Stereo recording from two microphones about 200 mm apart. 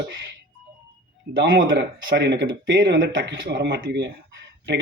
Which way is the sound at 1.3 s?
70° right (ahead or behind).